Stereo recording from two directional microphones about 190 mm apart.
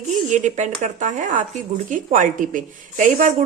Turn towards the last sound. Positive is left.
turn(degrees=-40)  # may be behind; listen again after turning